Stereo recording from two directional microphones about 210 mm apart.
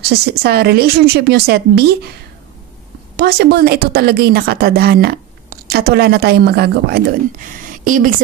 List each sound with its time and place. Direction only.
0.0 s a woman's voice: 50° right (ahead or behind)
3.2 s a woman's voice: 50° right (ahead or behind)
7.6 s a sound: 40° right (ahead or behind)